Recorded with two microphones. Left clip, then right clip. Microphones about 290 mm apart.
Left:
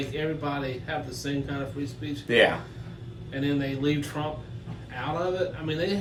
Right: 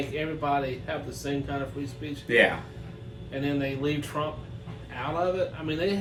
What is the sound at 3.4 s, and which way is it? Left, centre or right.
Speech, centre.